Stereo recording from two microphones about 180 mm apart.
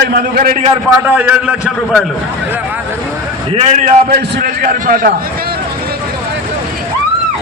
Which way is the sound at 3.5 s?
45° right (ahead or behind).